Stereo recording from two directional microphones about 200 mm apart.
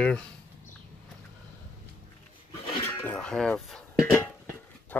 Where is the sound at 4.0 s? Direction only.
10° left (ahead or behind).